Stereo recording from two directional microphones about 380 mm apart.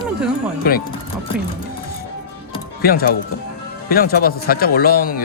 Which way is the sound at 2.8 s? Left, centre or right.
Left.